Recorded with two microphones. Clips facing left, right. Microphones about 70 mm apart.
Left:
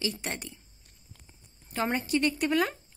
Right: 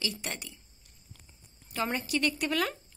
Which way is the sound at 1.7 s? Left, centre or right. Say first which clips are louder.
Left 3 dB; left.